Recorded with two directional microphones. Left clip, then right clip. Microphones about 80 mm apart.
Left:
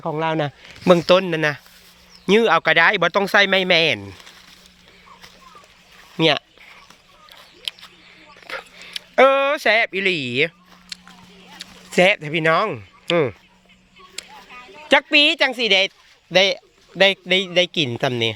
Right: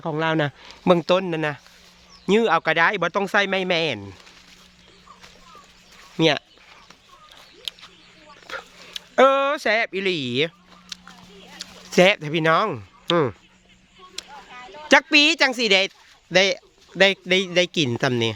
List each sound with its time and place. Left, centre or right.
0.0 s a man's voice: right
1.0 s speech: left
2.2 s speech: left
6.1 s speech: centre
7.3 s a sound: centre
9.6 s speech: centre
11.5 s a sound: right
12.5 s speech: right
14.9 s a woman's voice: right
16.3 s a man's voice: right